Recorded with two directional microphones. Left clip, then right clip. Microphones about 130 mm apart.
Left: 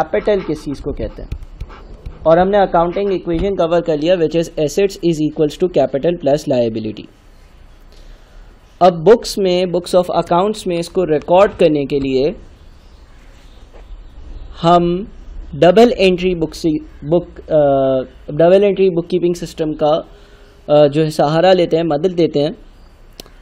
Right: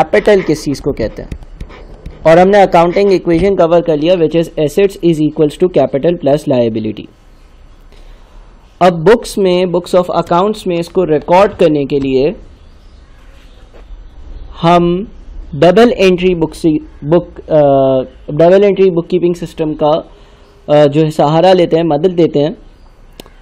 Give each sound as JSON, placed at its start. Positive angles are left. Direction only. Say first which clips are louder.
{"t": 0.1, "sound": "speech", "louder": "right 7 dB", "side_deg": -50}
{"t": 1.6, "sound": "a sound", "louder": "right 4 dB", "side_deg": -20}
{"t": 2.2, "sound": "a man's voice", "louder": "right 5 dB", "side_deg": -40}
{"t": 9.0, "sound": "a man's voice", "louder": "right 2 dB", "side_deg": -30}
{"t": 14.5, "sound": "a man's voice", "louder": "right 3 dB", "side_deg": -20}
{"t": 19.3, "sound": "a man's voice", "louder": "right 3 dB", "side_deg": -25}